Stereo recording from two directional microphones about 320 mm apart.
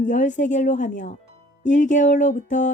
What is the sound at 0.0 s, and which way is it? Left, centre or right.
A woman's voice, left.